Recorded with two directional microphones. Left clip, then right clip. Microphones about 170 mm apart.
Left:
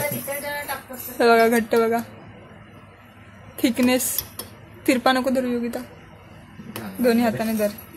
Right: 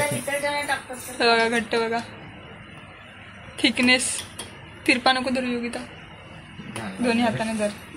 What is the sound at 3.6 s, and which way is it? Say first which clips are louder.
A woman's voice: right 1 dB; 50° left (ahead or behind).